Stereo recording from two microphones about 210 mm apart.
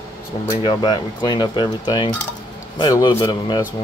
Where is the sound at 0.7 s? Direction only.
20° left (ahead or behind).